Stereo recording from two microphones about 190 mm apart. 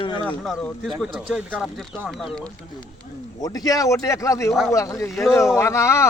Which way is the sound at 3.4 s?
20° left (ahead or behind).